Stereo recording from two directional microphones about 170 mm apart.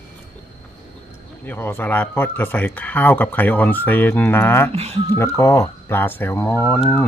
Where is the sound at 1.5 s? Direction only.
15° left (ahead or behind).